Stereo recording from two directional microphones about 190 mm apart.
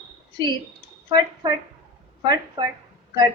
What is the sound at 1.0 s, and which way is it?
A woman's voice, 25° right (ahead or behind).